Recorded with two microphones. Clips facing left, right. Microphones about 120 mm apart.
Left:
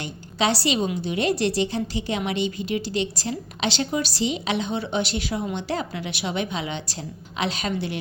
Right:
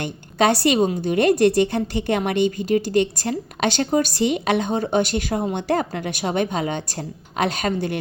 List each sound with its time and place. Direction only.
0.0 s a woman's voice: 50° right (ahead or behind)